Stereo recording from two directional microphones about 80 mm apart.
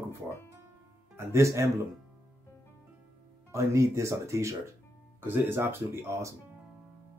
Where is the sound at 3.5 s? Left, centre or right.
Right.